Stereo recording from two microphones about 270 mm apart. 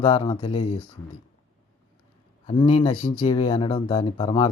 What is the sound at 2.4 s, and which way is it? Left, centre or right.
Speech, left.